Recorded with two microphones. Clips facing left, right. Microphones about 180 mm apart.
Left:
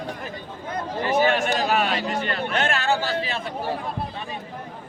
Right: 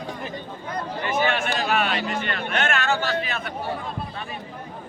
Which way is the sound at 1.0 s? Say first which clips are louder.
Left 4 dB; 35° left (ahead or behind).